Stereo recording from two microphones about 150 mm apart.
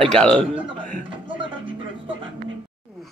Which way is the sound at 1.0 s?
35° right (ahead or behind).